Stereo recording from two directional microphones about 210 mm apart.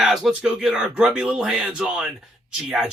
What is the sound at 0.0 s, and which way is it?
Speech, centre (ahead or behind).